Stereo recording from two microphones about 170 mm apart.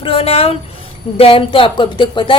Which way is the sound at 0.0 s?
35° left (ahead or behind).